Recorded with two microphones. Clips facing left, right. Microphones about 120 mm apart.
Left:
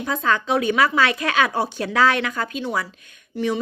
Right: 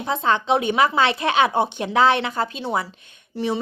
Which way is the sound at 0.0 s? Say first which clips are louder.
Right 1 dB; 25° right (ahead or behind).